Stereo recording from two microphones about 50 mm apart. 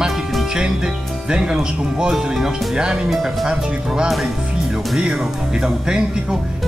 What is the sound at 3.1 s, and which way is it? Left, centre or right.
Speech, centre.